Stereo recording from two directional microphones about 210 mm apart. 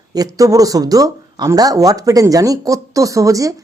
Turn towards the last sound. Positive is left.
turn(degrees=-15)  # may be behind; listen again after turning